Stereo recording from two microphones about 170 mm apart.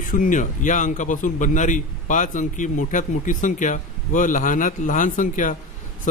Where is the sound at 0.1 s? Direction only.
50° left (ahead or behind).